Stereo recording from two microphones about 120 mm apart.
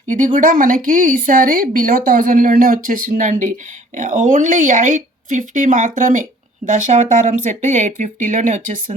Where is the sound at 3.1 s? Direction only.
90° right.